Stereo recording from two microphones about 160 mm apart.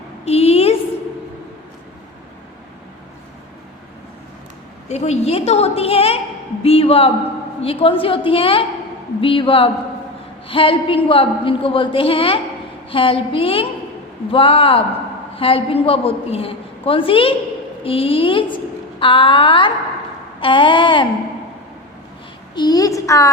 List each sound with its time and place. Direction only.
0.3 s a sound: 40° left (ahead or behind)
4.9 s a woman's voice: 40° left (ahead or behind)
22.5 s a child's voice: 25° left (ahead or behind)